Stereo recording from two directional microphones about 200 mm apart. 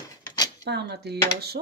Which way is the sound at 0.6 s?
55° right (ahead or behind).